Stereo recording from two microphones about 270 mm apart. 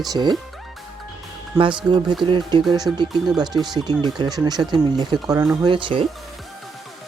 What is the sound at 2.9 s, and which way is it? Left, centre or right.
Speech, centre.